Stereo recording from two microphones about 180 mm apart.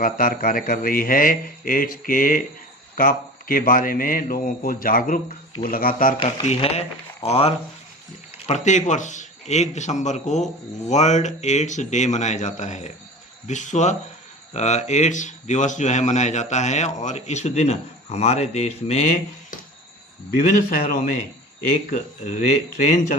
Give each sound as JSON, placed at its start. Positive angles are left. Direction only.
{"t": 0.0, "sound": "speech", "side_deg": 50}
{"t": 6.1, "sound": "a man's voice", "side_deg": 35}
{"t": 20.4, "sound": "a man's voice", "side_deg": 40}